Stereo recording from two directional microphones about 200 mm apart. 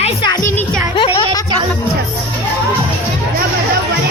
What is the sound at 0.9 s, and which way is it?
Music, 25° left (ahead or behind).